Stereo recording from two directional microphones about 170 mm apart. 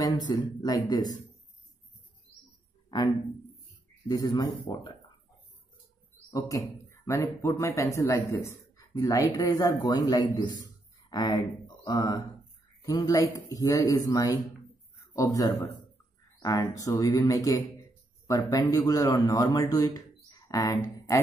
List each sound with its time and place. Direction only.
0.0 s speech: 25° left (ahead or behind)
4.1 s a man's voice: 25° left (ahead or behind)
6.3 s a man's voice: 20° left (ahead or behind)